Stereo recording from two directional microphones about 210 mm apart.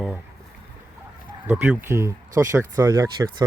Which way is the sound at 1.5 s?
10° right (ahead or behind).